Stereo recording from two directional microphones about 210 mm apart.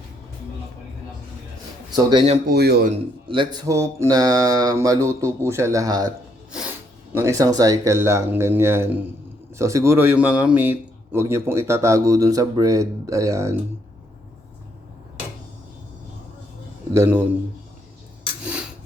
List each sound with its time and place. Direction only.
2.0 s speech: 25° right (ahead or behind)
2.5 s speech: 50° right (ahead or behind)
3.2 s a man's voice: 20° right (ahead or behind)
16.9 s a man's voice: 10° right (ahead or behind)